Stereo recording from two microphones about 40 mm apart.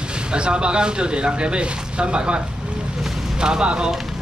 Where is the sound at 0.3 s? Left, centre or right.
Right.